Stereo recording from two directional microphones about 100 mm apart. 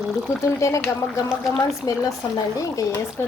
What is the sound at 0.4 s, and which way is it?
Speech, 30° left (ahead or behind).